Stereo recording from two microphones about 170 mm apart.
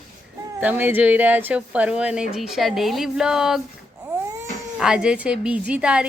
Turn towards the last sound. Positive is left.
turn(degrees=-5)  # may be behind; listen again after turning